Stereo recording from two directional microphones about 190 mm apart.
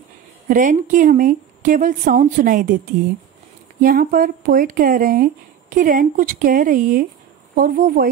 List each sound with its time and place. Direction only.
0.5 s speech: 45° right (ahead or behind)
3.8 s speech: 45° right (ahead or behind)